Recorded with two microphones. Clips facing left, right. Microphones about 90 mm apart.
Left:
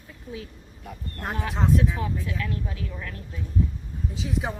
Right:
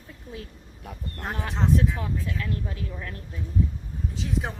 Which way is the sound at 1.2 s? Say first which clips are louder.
Left 1 dB; centre (ahead or behind).